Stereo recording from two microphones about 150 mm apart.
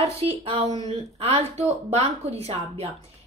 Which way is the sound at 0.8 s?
45° right (ahead or behind).